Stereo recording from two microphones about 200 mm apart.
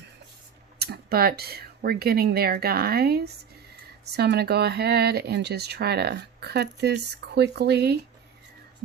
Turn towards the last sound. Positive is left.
turn(degrees=-55)  # may be behind; listen again after turning